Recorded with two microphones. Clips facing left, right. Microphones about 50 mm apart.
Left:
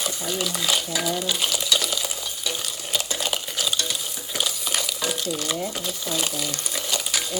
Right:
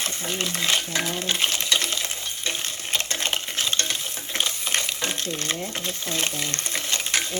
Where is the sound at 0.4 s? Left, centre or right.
Right.